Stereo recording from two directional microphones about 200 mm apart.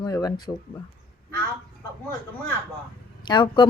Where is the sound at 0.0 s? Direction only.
20° left (ahead or behind).